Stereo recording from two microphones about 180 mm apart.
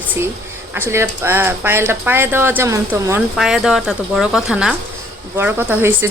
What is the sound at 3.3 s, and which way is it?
Speech, centre (ahead or behind).